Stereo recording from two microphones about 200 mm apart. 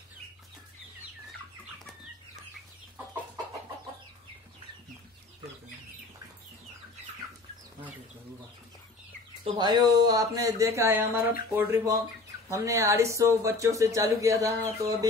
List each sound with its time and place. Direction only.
9.4 s speech: 20° right (ahead or behind)